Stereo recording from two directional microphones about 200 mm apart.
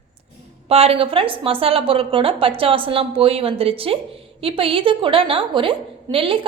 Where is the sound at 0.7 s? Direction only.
30° right (ahead or behind).